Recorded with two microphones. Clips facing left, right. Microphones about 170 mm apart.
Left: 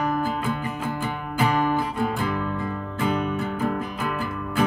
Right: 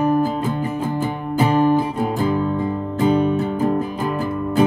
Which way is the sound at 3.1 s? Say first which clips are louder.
Right 8 dB; 30° right (ahead or behind).